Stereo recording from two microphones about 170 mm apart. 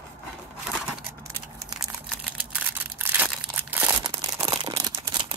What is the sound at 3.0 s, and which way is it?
Crumpling, 10° right (ahead or behind).